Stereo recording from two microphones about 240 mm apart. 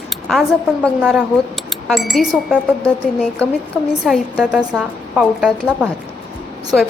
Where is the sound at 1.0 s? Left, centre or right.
Centre.